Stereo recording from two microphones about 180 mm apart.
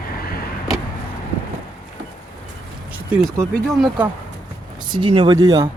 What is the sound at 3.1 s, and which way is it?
Speech, 10° right (ahead or behind).